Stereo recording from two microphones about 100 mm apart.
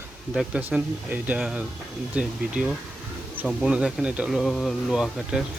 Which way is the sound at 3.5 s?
Centre (ahead or behind).